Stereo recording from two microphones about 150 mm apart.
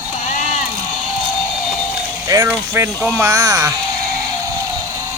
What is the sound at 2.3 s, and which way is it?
Speech, 20° right (ahead or behind).